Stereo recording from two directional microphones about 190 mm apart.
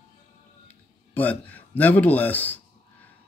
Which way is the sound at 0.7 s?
10° left (ahead or behind).